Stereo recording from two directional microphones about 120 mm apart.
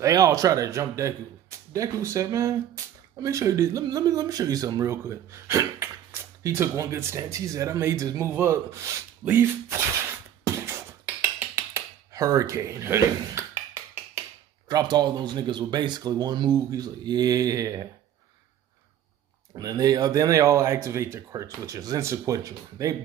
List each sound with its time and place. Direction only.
0.0 s a man's voice: 30° right (ahead or behind)
10.4 s a sound: 20° right (ahead or behind)
14.7 s speech: 35° right (ahead or behind)
19.6 s a man's voice: 30° right (ahead or behind)